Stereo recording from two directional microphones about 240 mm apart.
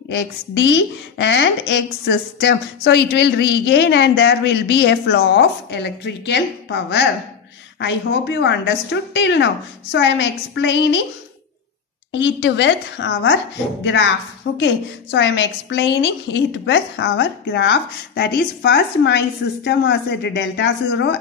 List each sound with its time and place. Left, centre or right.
0.1 s a woman's voice: left
12.1 s a woman's voice: left
14.6 s a woman's voice: left